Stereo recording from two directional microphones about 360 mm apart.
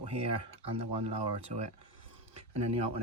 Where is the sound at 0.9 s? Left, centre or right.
Right.